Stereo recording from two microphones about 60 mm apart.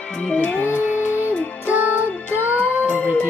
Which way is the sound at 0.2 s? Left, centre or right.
Left.